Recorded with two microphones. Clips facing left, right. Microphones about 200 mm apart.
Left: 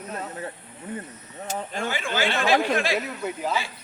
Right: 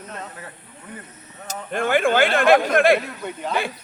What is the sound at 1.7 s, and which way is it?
Speech, 55° right (ahead or behind).